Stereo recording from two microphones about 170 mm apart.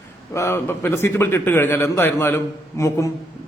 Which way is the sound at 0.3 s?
15° left (ahead or behind).